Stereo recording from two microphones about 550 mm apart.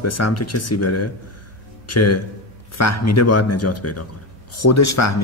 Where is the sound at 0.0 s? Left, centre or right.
Left.